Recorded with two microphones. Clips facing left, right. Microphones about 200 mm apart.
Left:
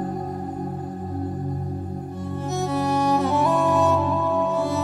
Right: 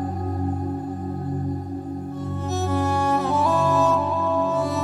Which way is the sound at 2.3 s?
Centre (ahead or behind).